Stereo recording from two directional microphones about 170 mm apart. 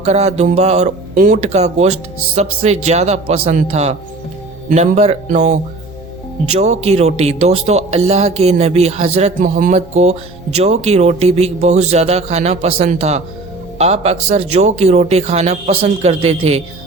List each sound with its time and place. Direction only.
0.0 s speech: 40° right (ahead or behind)